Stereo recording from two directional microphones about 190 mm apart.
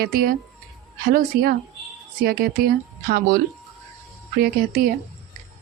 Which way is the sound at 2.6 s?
55° right (ahead or behind).